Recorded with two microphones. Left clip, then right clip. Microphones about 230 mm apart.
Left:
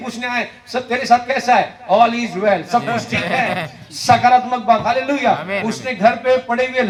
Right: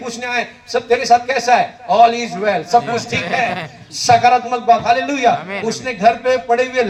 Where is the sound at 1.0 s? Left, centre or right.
Right.